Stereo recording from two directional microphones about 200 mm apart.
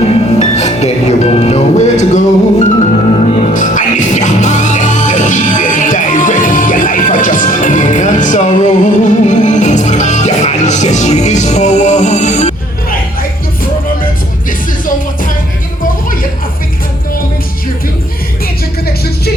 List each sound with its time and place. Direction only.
0.0 s music: 35° left (ahead or behind)